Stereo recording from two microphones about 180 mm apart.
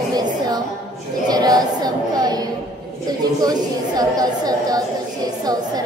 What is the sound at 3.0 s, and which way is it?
A woman's voice, 20° right (ahead or behind).